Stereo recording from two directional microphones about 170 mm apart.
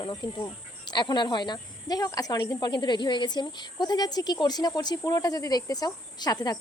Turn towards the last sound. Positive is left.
turn(degrees=25)  # may be behind; listen again after turning